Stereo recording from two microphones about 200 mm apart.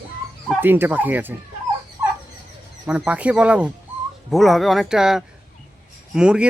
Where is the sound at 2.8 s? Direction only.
5° right (ahead or behind).